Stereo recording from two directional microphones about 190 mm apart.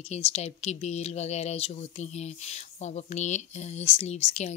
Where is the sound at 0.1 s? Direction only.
35° left (ahead or behind).